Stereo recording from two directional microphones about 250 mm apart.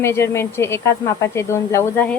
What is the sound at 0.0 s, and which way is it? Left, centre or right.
Speech, centre.